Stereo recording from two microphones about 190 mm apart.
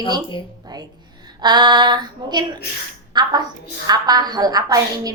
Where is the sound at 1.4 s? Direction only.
20° right (ahead or behind).